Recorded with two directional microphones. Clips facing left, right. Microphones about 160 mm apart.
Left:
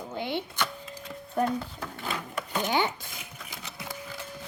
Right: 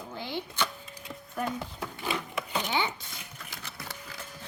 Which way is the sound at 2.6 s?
45° left (ahead or behind).